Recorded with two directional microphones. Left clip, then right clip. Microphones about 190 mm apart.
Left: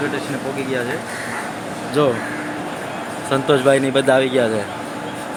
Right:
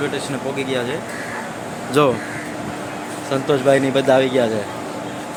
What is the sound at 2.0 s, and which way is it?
Speech, 45° right (ahead or behind).